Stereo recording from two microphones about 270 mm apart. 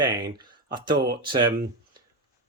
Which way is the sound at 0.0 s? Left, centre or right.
Centre.